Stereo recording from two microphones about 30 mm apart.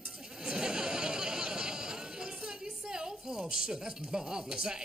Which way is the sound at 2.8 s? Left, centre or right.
Right.